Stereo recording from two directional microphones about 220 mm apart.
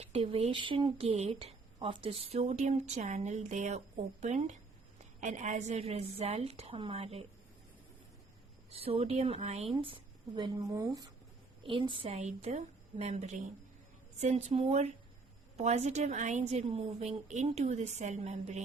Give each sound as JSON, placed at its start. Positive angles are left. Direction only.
{"t": 0.0, "sound": "speech", "side_deg": -25}
{"t": 8.7, "sound": "a woman's voice", "side_deg": -25}